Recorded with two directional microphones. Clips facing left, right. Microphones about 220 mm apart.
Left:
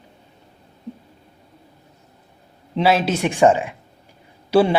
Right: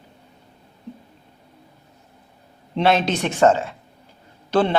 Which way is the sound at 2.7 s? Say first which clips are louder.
Left 1 dB; 5° left (ahead or behind).